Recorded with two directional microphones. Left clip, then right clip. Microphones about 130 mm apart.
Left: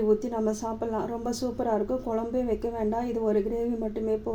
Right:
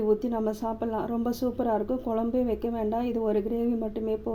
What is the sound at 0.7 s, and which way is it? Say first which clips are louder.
A woman's voice: even; 10° right (ahead or behind).